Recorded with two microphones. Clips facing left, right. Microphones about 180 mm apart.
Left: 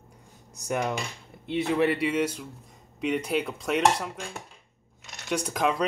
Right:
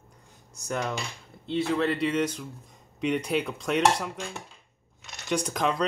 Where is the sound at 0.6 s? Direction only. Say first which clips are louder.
Left 2 dB; 15° left (ahead or behind).